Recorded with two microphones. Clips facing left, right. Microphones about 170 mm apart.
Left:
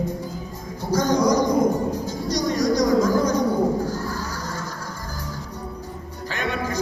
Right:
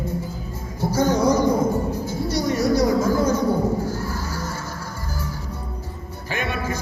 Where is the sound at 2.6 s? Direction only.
15° left (ahead or behind).